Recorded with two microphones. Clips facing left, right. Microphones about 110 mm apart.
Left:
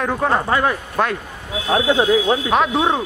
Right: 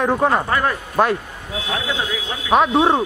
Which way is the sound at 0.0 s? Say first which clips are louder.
Right 2 dB; 15° right (ahead or behind).